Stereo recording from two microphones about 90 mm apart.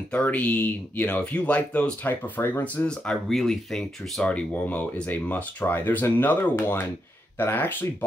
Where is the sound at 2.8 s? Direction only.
10° left (ahead or behind).